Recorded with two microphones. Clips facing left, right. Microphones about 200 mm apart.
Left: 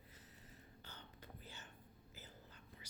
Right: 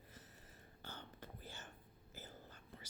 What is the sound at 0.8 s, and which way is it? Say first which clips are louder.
Whispering: right 7 dB; 50° right (ahead or behind).